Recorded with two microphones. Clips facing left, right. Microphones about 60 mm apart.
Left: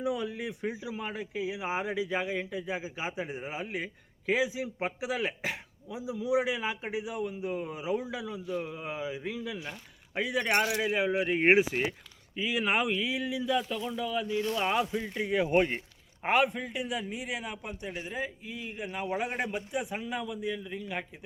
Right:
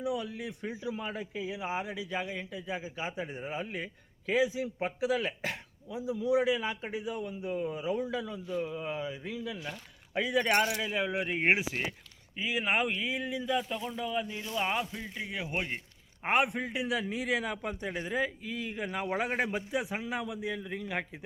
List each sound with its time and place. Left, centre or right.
0.0 s a man's voice: left; by 8.6 s centre
8.6 s a man's voice: centre
12.4 s speech: centre
13.5 s speech: centre
14.5 s speech: centre
14.9 s a man's voice: centre
15.2 s a man's voice: left
16.2 s speech: centre
16.7 s a man's voice: right
17.0 s a man's voice: right
17.7 s speech: right
19.5 s a man's voice: right
20.0 s a man's voice: right
20.5 s a man's voice: right